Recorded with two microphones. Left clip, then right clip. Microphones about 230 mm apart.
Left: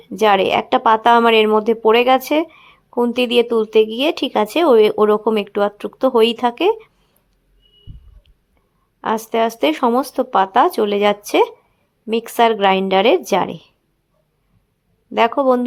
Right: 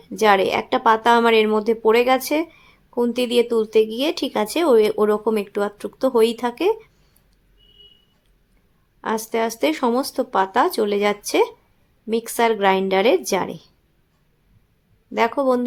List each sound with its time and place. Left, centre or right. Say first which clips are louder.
0.2 s speech: left 3 dB; centre
9.0 s speech: left 5 dB; centre
15.1 s speech: left 4 dB; centre